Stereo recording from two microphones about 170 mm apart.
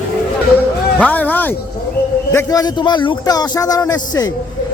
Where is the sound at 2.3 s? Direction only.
20° left (ahead or behind).